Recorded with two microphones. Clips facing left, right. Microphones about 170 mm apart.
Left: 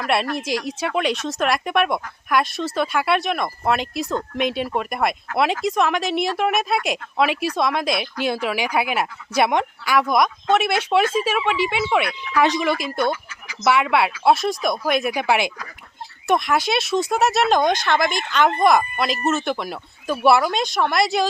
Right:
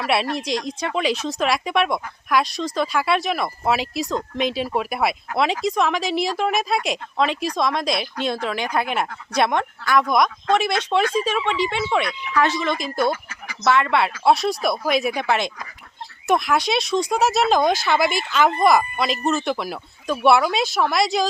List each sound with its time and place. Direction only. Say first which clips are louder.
0.0 s a woman's voice: even; centre (ahead or behind); by 12.7 s 15° left (ahead or behind)
12.7 s a woman's voice: even; centre (ahead or behind)